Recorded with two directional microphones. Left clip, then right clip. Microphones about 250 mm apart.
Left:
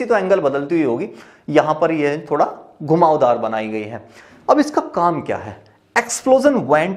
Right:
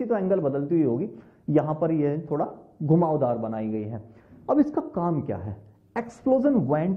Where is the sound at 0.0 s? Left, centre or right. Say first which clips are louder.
Left 9 dB; centre.